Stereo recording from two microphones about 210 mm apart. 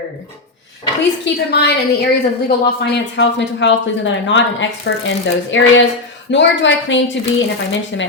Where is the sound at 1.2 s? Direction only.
50° left (ahead or behind).